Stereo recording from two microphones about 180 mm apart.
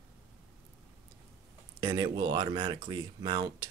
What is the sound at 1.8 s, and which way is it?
Speech, 20° right (ahead or behind).